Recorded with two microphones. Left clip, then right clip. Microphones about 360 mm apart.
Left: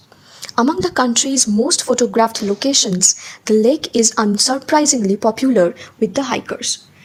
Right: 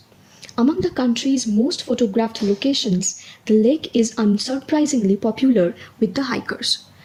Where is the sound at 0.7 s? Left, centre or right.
Centre.